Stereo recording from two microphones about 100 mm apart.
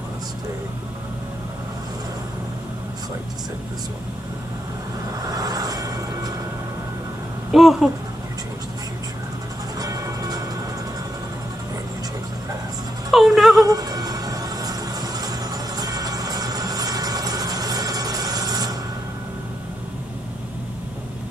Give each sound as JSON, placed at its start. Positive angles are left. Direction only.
{"t": 5.2, "sound": "vehicle", "side_deg": -40}
{"t": 7.5, "sound": "speech", "side_deg": -5}
{"t": 9.8, "sound": "music", "side_deg": -35}
{"t": 13.1, "sound": "music", "side_deg": -5}
{"t": 13.7, "sound": "a sound", "side_deg": -40}